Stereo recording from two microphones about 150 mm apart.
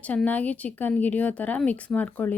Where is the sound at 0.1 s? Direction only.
10° left (ahead or behind).